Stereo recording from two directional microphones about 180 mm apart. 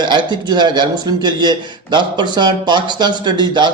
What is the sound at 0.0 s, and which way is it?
Speech, 25° right (ahead or behind).